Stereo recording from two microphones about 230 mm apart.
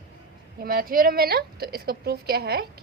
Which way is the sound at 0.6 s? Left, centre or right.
Right.